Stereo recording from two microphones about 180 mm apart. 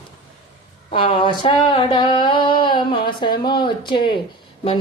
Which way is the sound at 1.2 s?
25° left (ahead or behind).